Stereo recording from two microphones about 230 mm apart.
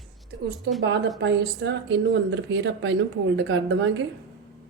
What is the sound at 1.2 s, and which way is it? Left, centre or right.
Speech, right.